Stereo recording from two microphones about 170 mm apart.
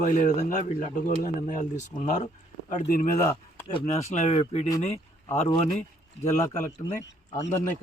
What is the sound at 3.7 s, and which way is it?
Speech, 40° left (ahead or behind).